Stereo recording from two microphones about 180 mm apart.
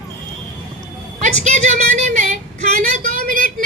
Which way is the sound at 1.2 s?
40° right (ahead or behind).